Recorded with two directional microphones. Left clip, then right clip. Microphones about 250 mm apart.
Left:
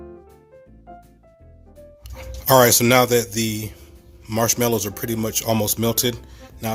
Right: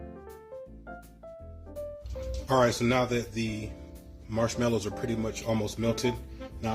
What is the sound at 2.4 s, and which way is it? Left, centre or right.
Speech, left.